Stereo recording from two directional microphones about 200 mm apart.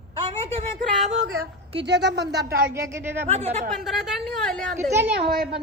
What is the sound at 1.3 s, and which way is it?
Speech, 60° right (ahead or behind).